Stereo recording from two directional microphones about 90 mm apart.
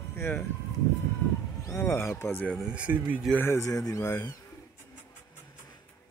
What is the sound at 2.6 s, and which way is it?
Speech, 10° right (ahead or behind).